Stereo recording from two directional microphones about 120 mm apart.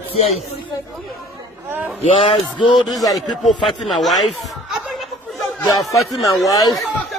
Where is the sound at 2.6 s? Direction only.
40° left (ahead or behind).